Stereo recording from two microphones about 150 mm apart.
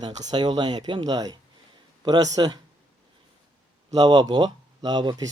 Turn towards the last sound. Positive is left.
turn(degrees=-25)  # may be behind; listen again after turning